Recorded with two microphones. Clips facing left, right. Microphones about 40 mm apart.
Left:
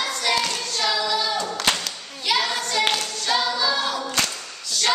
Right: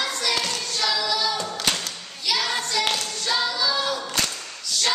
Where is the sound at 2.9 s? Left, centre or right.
Centre.